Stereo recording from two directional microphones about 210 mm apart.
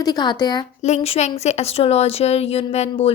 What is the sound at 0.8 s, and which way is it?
A woman's voice, 30° left (ahead or behind).